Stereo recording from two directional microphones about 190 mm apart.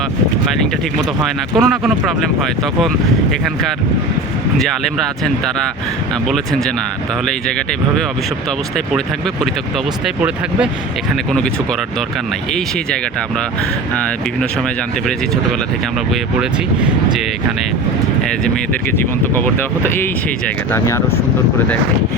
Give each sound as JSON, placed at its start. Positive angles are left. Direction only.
{"t": 1.2, "sound": "speech", "side_deg": 0}
{"t": 8.7, "sound": "speech", "side_deg": 0}
{"t": 16.4, "sound": "speech", "side_deg": -5}
{"t": 18.9, "sound": "speech", "side_deg": 10}